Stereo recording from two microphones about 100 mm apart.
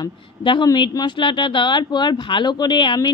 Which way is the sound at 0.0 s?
55° left (ahead or behind).